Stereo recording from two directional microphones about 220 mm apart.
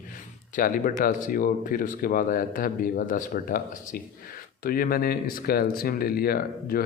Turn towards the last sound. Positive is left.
turn(degrees=40)  # may be behind; listen again after turning